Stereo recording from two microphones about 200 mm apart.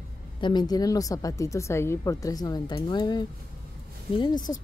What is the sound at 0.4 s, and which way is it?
A woman's voice, 20° left (ahead or behind).